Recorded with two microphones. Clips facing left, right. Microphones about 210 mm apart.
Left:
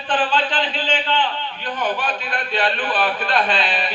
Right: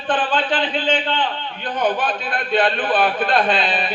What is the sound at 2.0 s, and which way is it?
A man's voice, 50° right (ahead or behind).